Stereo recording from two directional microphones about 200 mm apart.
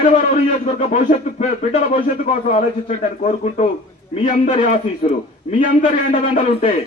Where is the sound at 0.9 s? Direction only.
35° left (ahead or behind).